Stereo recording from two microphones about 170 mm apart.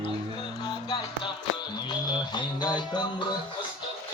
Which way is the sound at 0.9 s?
25° left (ahead or behind).